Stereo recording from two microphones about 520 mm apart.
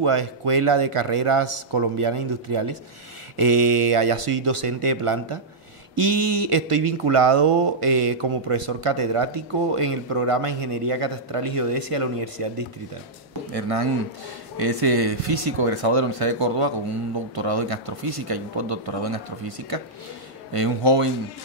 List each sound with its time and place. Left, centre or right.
0.0 s speech: right
17.4 s speech: right
20.5 s speech: right